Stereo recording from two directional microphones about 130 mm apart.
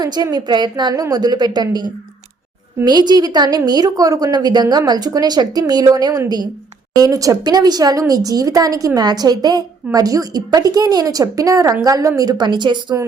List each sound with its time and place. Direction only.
0.0 s a woman's voice: 30° right (ahead or behind)